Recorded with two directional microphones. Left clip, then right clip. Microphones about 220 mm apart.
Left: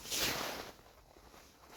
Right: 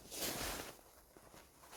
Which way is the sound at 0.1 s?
30° left (ahead or behind).